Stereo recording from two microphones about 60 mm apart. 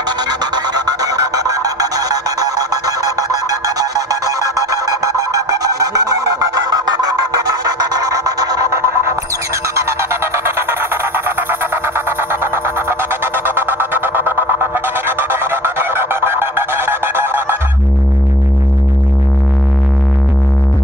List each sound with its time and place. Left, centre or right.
1.0 s a sound: right
7.6 s music: right
8.7 s music: right